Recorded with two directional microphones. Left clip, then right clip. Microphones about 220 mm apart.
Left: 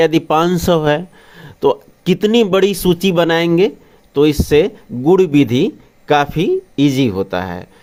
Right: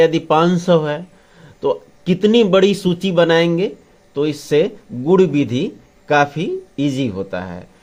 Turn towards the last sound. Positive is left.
turn(degrees=35)  # may be behind; listen again after turning